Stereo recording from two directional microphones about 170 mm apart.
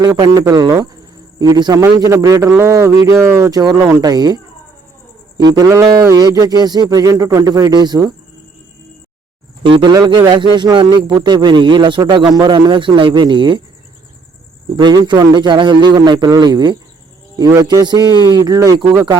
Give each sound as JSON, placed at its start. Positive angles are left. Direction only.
{"t": 0.0, "sound": "speech", "side_deg": -20}
{"t": 5.4, "sound": "speech", "side_deg": -20}
{"t": 9.7, "sound": "speech", "side_deg": -25}
{"t": 14.8, "sound": "speech", "side_deg": -25}